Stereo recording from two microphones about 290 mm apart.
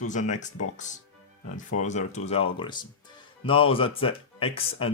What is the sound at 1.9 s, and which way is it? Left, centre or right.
Speech, left.